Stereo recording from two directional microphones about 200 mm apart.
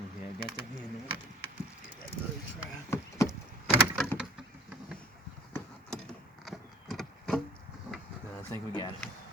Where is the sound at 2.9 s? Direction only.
15° left (ahead or behind).